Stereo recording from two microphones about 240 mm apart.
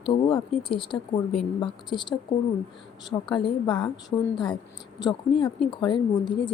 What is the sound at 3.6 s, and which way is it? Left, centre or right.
A woman's voice, centre.